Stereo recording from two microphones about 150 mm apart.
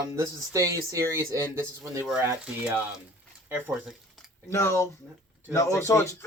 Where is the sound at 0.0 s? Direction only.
20° right (ahead or behind).